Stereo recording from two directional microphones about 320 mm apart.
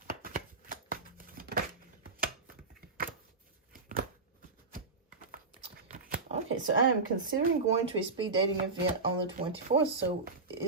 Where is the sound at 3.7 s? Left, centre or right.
Right.